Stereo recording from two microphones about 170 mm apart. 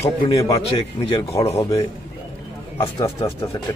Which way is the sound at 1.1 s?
35° left (ahead or behind).